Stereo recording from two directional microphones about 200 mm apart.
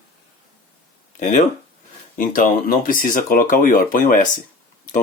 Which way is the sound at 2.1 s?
45° left (ahead or behind).